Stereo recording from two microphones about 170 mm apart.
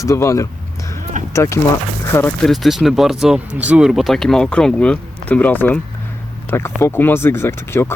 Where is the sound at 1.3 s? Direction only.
15° left (ahead or behind).